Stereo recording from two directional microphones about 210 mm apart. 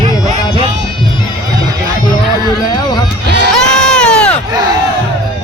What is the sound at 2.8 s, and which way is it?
Music, 20° left (ahead or behind).